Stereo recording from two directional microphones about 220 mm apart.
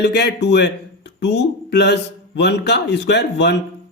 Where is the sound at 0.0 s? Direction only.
50° left (ahead or behind).